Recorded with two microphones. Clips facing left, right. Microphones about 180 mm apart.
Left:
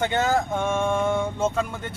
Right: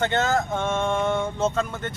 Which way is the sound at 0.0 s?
10° left (ahead or behind).